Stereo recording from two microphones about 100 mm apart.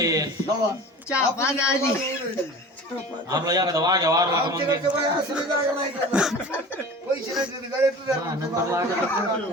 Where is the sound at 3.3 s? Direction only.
40° right (ahead or behind).